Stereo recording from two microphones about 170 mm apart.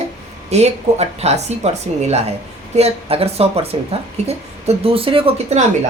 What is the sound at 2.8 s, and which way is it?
Speech, 35° right (ahead or behind).